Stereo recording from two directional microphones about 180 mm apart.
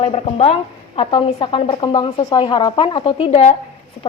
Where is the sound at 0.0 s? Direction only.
35° left (ahead or behind).